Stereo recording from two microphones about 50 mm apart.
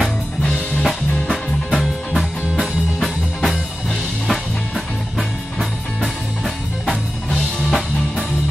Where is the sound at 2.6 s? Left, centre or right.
Centre.